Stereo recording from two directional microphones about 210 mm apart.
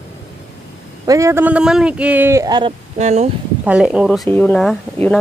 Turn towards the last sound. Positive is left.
turn(degrees=5)  # may be behind; listen again after turning